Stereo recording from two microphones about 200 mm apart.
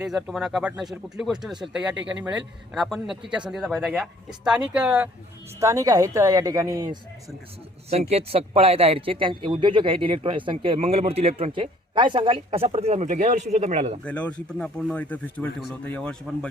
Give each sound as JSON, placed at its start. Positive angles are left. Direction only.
{"t": 0.0, "sound": "a woman's voice", "side_deg": -5}
{"t": 7.9, "sound": "speech", "side_deg": -30}
{"t": 14.0, "sound": "speech", "side_deg": 5}